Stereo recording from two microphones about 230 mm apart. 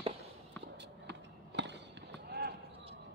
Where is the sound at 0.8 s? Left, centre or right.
Right.